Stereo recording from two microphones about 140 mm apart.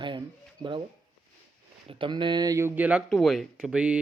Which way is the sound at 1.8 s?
35° right (ahead or behind).